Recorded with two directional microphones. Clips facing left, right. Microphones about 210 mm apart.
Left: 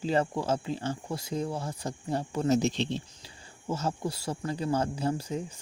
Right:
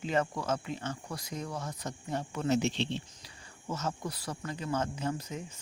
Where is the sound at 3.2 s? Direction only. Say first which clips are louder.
Left 5 dB; 30° left (ahead or behind).